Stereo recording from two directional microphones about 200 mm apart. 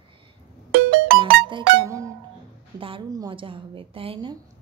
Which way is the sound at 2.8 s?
25° right (ahead or behind).